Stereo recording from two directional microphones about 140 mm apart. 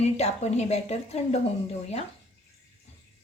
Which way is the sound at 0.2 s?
50° left (ahead or behind).